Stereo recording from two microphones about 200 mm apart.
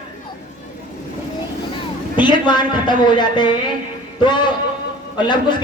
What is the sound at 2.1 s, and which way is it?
A man's voice, 20° left (ahead or behind).